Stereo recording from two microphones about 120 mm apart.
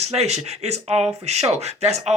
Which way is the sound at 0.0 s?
60° right (ahead or behind).